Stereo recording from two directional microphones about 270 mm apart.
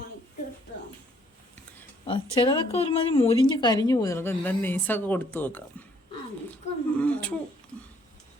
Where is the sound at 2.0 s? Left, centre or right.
Centre.